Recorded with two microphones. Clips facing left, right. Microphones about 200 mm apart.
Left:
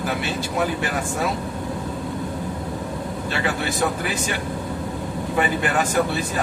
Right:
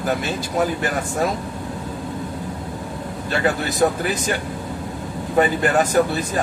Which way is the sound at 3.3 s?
40° right (ahead or behind).